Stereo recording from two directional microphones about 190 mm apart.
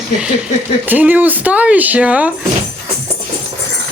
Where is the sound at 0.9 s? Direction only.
10° right (ahead or behind).